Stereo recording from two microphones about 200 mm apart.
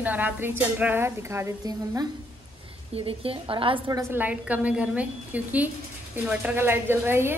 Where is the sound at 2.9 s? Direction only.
30° right (ahead or behind).